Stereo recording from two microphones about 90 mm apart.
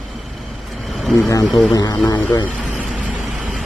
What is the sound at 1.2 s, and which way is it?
Speech, 45° left (ahead or behind).